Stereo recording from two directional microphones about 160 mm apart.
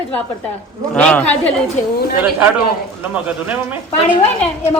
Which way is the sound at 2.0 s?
80° left.